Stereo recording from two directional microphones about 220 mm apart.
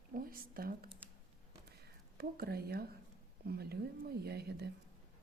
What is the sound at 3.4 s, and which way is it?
A woman's voice, 45° right (ahead or behind).